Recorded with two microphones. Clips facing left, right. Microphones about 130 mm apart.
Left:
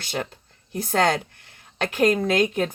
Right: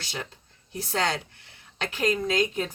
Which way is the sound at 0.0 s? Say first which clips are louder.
Left 7 dB; 55° left (ahead or behind).